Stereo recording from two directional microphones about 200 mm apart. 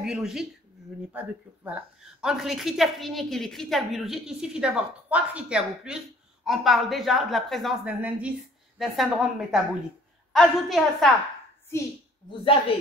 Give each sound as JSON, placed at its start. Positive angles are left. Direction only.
{"t": 0.0, "sound": "a woman's voice", "side_deg": -5}
{"t": 12.3, "sound": "a woman's voice", "side_deg": 25}